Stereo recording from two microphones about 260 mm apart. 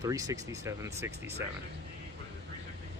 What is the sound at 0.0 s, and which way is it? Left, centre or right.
Speech, centre.